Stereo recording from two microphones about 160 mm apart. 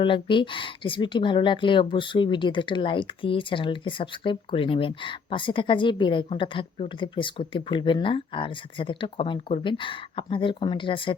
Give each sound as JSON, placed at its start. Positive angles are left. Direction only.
{"t": 0.0, "sound": "speech", "side_deg": 30}